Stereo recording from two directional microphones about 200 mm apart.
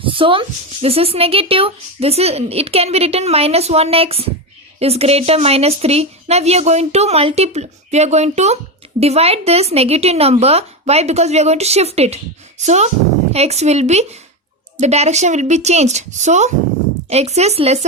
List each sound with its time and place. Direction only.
0.0 s a woman's voice: 25° right (ahead or behind)